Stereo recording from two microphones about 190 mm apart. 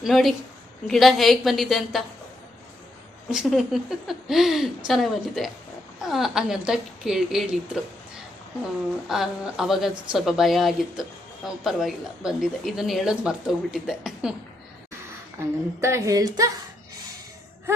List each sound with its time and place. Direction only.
0.0 s a woman's voice: centre (ahead or behind)
3.2 s a woman's voice: 5° right (ahead or behind)
15.8 s a woman's voice: 15° right (ahead or behind)